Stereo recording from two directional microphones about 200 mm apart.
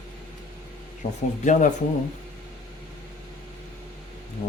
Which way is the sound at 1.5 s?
40° left (ahead or behind).